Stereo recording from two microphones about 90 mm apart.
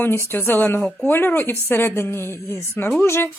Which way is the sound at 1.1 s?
20° left (ahead or behind).